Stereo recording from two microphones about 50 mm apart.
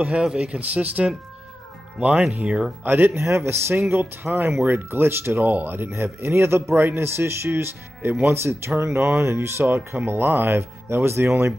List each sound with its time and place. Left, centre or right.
0.2 s speech: centre
2.8 s speech: right
3.2 s speech: right
3.9 s speech: right
5.4 s speech: right
6.2 s speech: right